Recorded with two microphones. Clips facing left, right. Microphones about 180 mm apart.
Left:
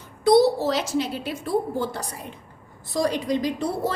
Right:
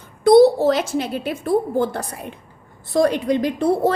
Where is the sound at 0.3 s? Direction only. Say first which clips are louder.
Right 6 dB; 50° right (ahead or behind).